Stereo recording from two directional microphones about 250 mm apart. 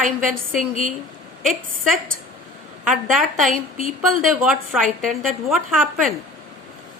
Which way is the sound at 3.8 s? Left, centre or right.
Right.